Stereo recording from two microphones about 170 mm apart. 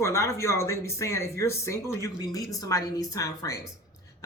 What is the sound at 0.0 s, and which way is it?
Speech, 15° left (ahead or behind).